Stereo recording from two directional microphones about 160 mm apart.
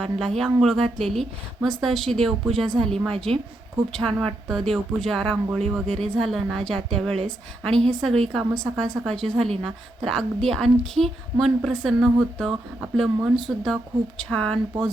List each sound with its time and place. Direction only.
0.0 s a woman's voice: centre (ahead or behind)
8.2 s a woman's voice: centre (ahead or behind)